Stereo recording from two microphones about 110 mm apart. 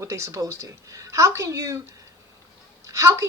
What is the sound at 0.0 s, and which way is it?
A woman's voice, 25° right (ahead or behind).